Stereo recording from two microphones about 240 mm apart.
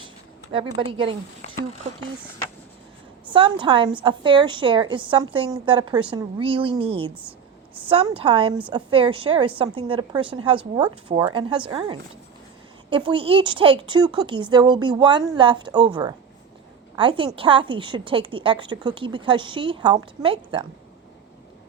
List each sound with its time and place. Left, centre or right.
0.5 s a woman's voice: right
3.2 s a woman's voice: right